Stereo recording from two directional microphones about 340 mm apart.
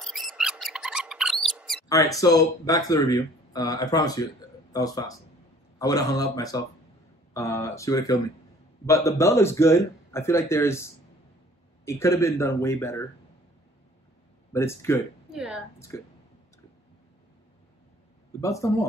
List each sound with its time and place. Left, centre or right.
0.0 s mouse: centre
1.9 s speech: centre
14.5 s speech: centre
15.9 s speech: centre
18.4 s speech: centre